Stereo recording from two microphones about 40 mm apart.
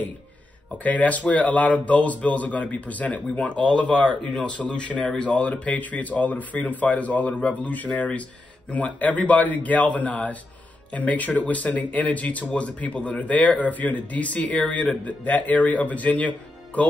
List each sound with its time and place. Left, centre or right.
0.8 s speech: left